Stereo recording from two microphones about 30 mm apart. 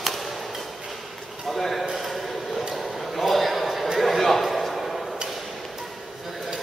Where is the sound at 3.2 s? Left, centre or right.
Centre.